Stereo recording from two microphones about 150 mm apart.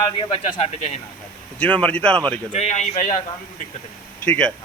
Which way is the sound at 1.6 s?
10° left (ahead or behind).